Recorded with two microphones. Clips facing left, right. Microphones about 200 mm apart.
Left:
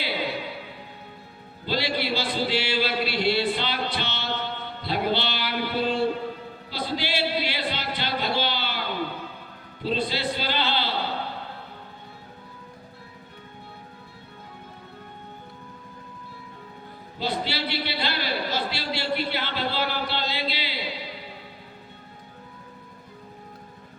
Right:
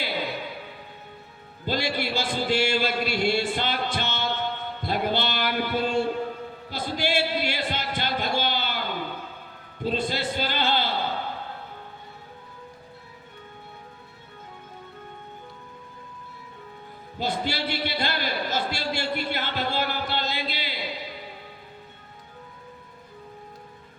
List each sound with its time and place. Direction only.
0.0 s music: 50° right (ahead or behind)
1.6 s speech: 50° right (ahead or behind)
6.7 s music: 50° right (ahead or behind)
9.8 s a man's voice: 50° right (ahead or behind)
17.2 s a man's voice: 50° right (ahead or behind)